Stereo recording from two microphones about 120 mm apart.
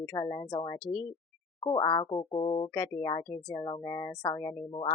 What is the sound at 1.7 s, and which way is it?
Speech, 40° left (ahead or behind).